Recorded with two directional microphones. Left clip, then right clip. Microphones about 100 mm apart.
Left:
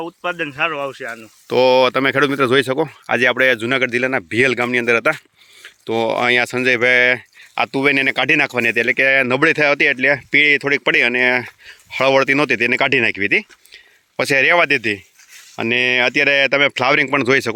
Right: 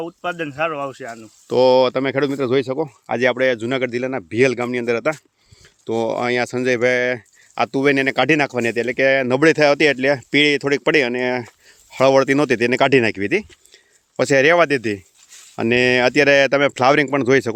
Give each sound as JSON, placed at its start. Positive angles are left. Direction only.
{"t": 1.5, "sound": "speech", "side_deg": -25}
{"t": 1.8, "sound": "speech", "side_deg": -5}
{"t": 3.1, "sound": "speech", "side_deg": -10}
{"t": 5.6, "sound": "speech", "side_deg": -20}
{"t": 9.4, "sound": "speech", "side_deg": -45}
{"t": 17.1, "sound": "speech", "side_deg": -35}